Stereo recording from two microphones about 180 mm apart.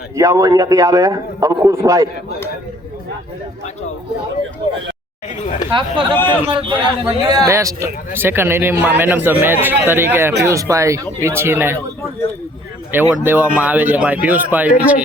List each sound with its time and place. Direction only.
0.2 s a man's voice: 15° right (ahead or behind)
6.2 s a man's voice: 25° right (ahead or behind); by 11.8 s 10° right (ahead or behind)
12.9 s a man's voice: 10° right (ahead or behind)